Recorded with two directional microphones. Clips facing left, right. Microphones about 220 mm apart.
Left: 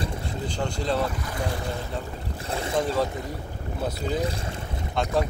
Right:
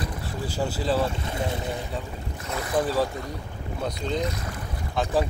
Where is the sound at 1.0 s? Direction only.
25° right (ahead or behind).